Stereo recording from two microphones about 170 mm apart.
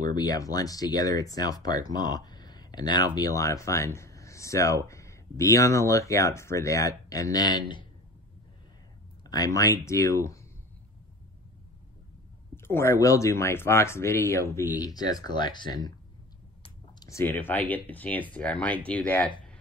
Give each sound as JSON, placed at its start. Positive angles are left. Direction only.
{"t": 0.0, "sound": "speech", "side_deg": 25}
{"t": 9.2, "sound": "speech", "side_deg": 20}
{"t": 12.6, "sound": "speech", "side_deg": 15}
{"t": 17.1, "sound": "speech", "side_deg": 15}